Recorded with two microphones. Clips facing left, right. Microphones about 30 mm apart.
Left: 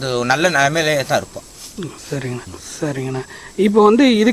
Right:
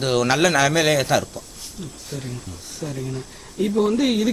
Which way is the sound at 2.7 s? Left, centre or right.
Left.